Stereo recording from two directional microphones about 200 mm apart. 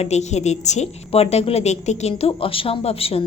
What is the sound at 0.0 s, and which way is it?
A woman's voice, 35° left (ahead or behind).